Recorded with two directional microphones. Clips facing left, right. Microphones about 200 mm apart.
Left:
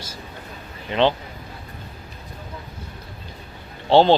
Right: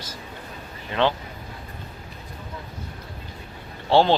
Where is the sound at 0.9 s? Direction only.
20° left (ahead or behind).